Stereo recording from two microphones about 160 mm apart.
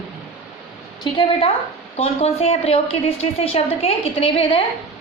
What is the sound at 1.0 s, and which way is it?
A woman's voice, 30° left (ahead or behind).